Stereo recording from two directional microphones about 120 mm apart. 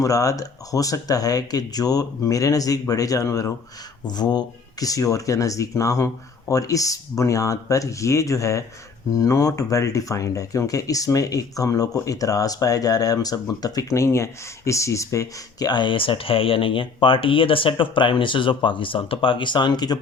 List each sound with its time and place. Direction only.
0.0 s speech: 30° left (ahead or behind)